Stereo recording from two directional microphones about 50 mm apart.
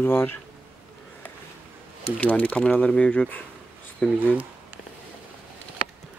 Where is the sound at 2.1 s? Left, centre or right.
Left.